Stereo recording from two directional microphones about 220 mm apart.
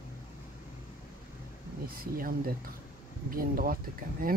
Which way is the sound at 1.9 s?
40° right (ahead or behind).